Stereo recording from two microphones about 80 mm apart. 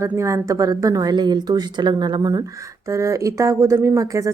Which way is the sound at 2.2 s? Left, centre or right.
Right.